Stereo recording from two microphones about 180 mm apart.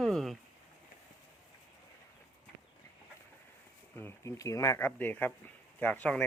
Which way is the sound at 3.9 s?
15° left (ahead or behind).